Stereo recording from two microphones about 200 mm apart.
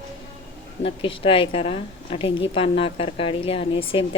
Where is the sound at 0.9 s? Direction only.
25° left (ahead or behind).